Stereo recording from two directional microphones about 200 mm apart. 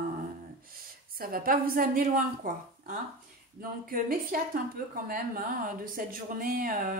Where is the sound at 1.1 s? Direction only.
45° right (ahead or behind).